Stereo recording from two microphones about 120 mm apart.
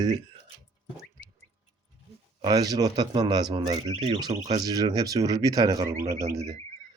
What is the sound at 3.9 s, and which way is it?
Speech, 45° right (ahead or behind).